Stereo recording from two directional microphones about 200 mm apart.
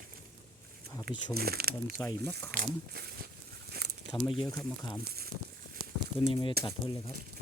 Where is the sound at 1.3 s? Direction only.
50° right (ahead or behind).